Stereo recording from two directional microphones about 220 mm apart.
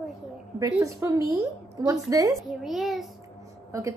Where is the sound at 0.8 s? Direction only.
15° right (ahead or behind).